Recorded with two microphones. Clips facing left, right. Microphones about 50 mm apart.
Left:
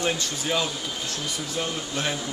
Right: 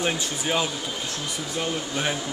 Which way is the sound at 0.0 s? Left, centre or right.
Centre.